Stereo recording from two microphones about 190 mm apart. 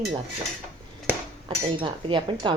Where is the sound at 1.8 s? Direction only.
25° right (ahead or behind).